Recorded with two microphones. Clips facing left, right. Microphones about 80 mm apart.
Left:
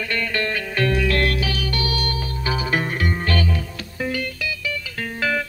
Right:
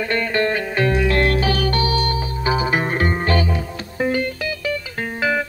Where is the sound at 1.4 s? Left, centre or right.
Right.